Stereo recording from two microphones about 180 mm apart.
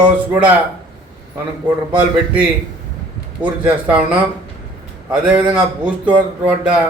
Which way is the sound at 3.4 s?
10° right (ahead or behind).